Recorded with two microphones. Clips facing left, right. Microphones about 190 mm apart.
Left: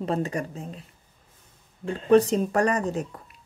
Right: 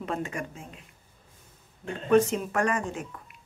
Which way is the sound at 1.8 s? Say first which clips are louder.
Left 3 dB; 35° left (ahead or behind).